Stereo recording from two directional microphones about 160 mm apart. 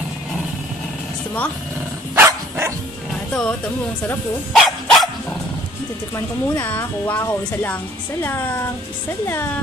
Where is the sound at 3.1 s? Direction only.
5° left (ahead or behind).